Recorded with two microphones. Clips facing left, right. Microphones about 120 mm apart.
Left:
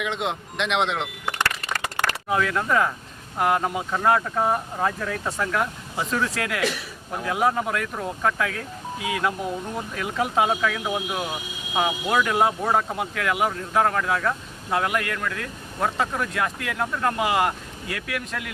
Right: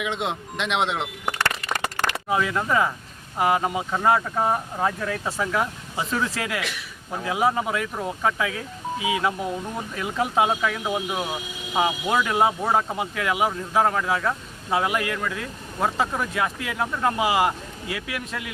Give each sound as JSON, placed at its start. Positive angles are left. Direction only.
{"t": 0.0, "sound": "speech", "side_deg": 0}
{"t": 1.5, "sound": "a sound", "side_deg": -25}
{"t": 2.3, "sound": "speech", "side_deg": -5}